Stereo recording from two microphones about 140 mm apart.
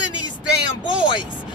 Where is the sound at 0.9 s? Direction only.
35° left (ahead or behind).